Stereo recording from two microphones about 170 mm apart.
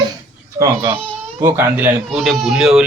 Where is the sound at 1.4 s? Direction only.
10° right (ahead or behind).